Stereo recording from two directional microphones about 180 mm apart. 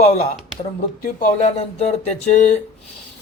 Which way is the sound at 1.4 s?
35° left (ahead or behind).